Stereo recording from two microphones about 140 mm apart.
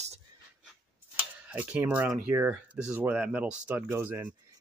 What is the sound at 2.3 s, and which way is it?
Speech, 10° right (ahead or behind).